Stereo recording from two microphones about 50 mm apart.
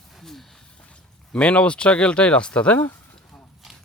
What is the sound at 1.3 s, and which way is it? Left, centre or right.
Speech, left.